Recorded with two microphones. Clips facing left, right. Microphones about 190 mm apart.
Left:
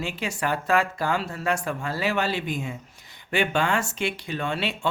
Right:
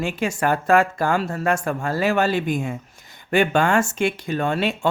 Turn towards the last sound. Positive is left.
turn(degrees=-45)  # may be behind; listen again after turning